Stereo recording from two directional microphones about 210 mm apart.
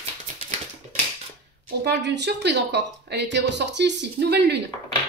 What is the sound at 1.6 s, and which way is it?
Speech, 55° right (ahead or behind).